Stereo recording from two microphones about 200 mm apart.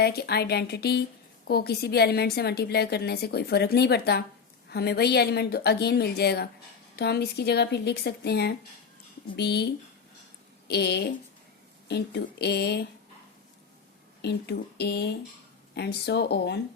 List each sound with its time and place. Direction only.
0.0 s a woman's voice: 55° left (ahead or behind)
10.7 s speech: 55° left (ahead or behind)
14.2 s speech: 55° left (ahead or behind)